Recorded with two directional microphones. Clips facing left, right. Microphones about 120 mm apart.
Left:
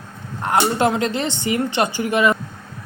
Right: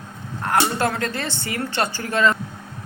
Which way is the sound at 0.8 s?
20° left (ahead or behind).